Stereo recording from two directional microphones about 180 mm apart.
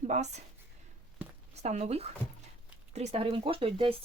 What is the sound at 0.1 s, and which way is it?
Speech, 40° right (ahead or behind).